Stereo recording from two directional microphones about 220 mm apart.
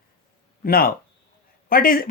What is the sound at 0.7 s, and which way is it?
Speech, 40° left (ahead or behind).